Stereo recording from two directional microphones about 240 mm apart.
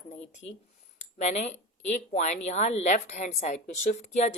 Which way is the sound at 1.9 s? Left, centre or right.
Left.